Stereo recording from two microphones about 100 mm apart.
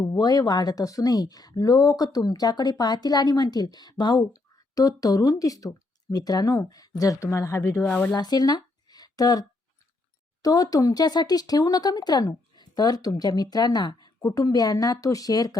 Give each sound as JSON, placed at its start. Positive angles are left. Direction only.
{"t": 0.2, "sound": "speech", "side_deg": 40}
{"t": 8.1, "sound": "speech", "side_deg": 45}
{"t": 10.4, "sound": "speech", "side_deg": 40}